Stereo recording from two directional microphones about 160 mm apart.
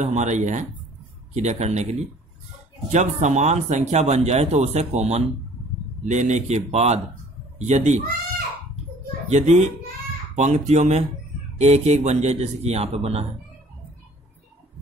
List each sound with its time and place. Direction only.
0.0 s speech: 45° right (ahead or behind)
9.3 s speech: 50° right (ahead or behind)